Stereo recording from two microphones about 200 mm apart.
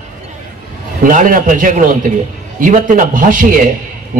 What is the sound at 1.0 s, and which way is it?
A man's voice, 40° right (ahead or behind).